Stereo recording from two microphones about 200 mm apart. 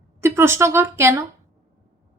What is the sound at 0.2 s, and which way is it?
A woman's voice, 10° right (ahead or behind).